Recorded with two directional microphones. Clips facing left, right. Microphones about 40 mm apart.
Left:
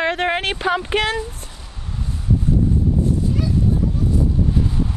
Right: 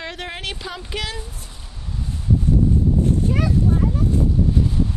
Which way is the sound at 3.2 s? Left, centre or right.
Right.